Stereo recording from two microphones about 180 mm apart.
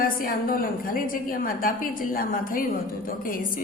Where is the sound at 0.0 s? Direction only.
50° left (ahead or behind).